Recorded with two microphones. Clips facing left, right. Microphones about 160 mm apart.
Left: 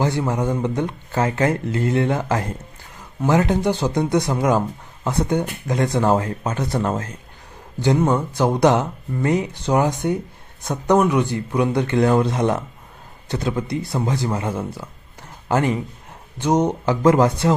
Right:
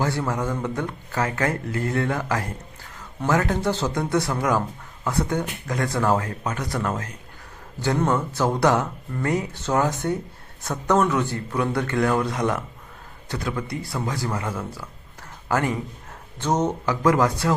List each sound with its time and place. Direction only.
0.0 s speech: 20° left (ahead or behind)
7.8 s speech: 15° left (ahead or behind)
16.8 s speech: 25° left (ahead or behind)